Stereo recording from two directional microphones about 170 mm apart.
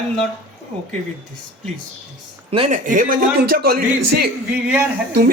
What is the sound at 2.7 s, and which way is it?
A man's voice, 50° right (ahead or behind).